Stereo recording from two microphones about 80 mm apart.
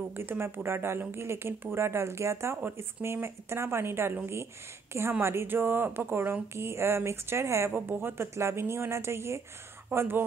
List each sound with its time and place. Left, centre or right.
0.1 s speech: right
5.2 s speech: right